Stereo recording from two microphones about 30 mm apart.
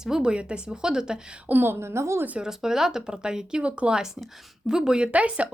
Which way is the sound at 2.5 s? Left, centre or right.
Centre.